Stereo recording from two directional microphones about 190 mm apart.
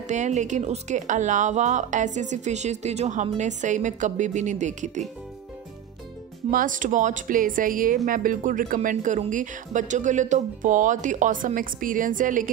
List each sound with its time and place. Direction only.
0.1 s speech: 40° right (ahead or behind)
6.5 s speech: 45° right (ahead or behind)